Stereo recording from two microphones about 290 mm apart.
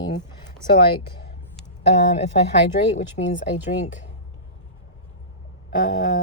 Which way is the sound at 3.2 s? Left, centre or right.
Left.